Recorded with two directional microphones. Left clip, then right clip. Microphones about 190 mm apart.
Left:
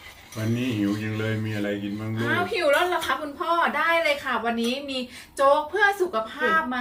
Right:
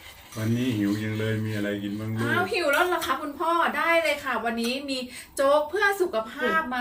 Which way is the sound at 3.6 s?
20° right (ahead or behind).